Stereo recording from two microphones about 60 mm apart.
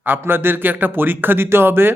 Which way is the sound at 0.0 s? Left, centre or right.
Right.